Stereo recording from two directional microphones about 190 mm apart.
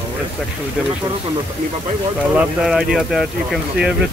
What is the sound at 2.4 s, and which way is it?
Speech, 5° right (ahead or behind).